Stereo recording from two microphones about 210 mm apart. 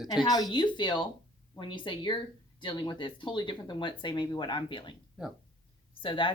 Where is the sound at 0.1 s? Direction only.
20° left (ahead or behind).